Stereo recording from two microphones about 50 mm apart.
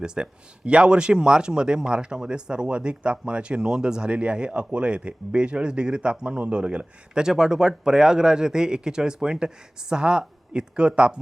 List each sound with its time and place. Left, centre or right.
0.0 s speech: centre